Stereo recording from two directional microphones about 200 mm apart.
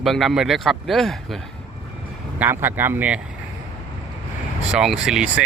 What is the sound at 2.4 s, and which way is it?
Speech, 10° right (ahead or behind).